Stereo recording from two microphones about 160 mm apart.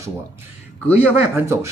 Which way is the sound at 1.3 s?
15° right (ahead or behind).